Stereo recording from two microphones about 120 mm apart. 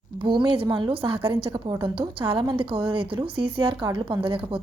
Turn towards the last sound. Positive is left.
turn(degrees=-45)  # may be behind; listen again after turning